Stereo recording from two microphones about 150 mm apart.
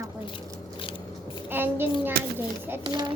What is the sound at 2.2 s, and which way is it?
Speech, 90° right.